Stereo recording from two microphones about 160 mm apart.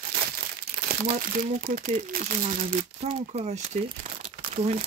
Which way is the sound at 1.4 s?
60° right (ahead or behind).